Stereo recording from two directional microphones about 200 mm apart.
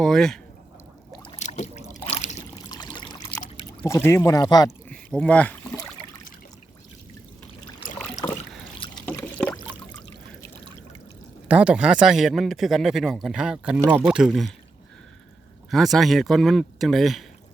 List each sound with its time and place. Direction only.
0.0 s a man's voice: centre (ahead or behind)
1.4 s boat: 35° left (ahead or behind)
1.9 s a sound: 30° left (ahead or behind)
2.6 s pour: 20° left (ahead or behind)
3.7 s speech: 15° left (ahead or behind)
4.9 s speech: 5° left (ahead or behind)
9.0 s a sound: 10° left (ahead or behind)
11.4 s a man's voice: 5° right (ahead or behind)
15.7 s a man's voice: centre (ahead or behind)